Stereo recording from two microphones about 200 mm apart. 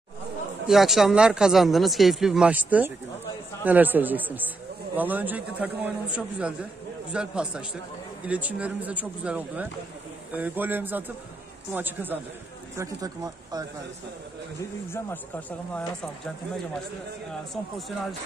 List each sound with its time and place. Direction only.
0.7 s a man's voice: centre (ahead or behind); by 13.7 s 20° right (ahead or behind)
14.9 s speech: 10° left (ahead or behind)
17.3 s speech: centre (ahead or behind)